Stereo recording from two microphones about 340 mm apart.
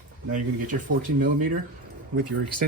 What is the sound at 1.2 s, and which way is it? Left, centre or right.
Speech, right.